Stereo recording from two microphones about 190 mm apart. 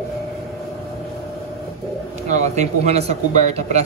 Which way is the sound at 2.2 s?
40° right (ahead or behind).